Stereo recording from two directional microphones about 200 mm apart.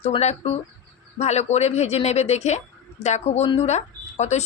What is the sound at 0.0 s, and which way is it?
A woman's voice, 30° left (ahead or behind).